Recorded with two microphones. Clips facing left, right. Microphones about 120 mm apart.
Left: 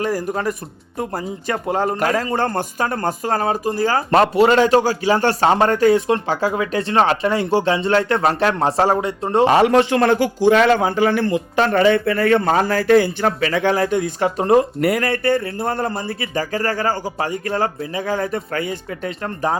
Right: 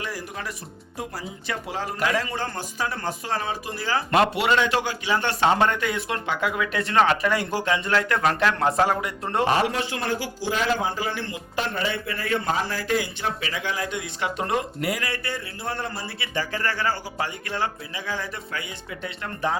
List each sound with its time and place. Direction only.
0.0 s a man's voice: 45° left (ahead or behind); by 9.5 s 25° left (ahead or behind)
9.5 s a man's voice: 75° left (ahead or behind); by 14.7 s 35° left (ahead or behind)
14.8 s a man's voice: 55° left (ahead or behind); by 19.5 s 40° left (ahead or behind)